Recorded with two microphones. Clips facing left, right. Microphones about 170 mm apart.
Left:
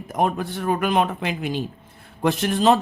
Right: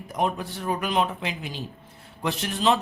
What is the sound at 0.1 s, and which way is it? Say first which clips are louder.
Speech: left 4 dB; 50° left (ahead or behind).